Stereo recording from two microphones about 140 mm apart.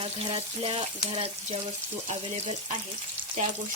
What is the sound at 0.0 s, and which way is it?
Speech, 40° right (ahead or behind).